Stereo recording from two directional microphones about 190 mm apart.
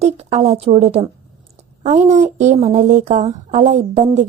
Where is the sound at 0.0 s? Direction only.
35° right (ahead or behind).